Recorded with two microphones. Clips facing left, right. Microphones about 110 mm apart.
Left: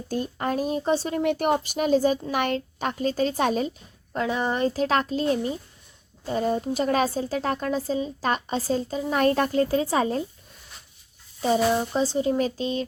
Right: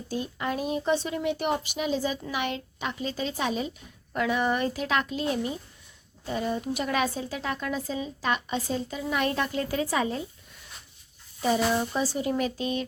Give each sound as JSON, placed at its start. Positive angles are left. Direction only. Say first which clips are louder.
{"t": 0.1, "sound": "a woman's voice", "louder": "left 4 dB", "side_deg": 45}
{"t": 1.2, "sound": "a woman's voice", "louder": "left 5 dB", "side_deg": 50}
{"t": 4.1, "sound": "a woman's voice", "louder": "even", "side_deg": 30}
{"t": 11.4, "sound": "speech", "louder": "left 3 dB", "side_deg": 30}